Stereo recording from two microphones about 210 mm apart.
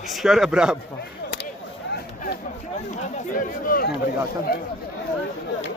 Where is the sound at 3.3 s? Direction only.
40° left (ahead or behind).